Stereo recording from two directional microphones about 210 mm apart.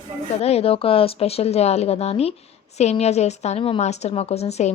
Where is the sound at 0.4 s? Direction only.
30° left (ahead or behind).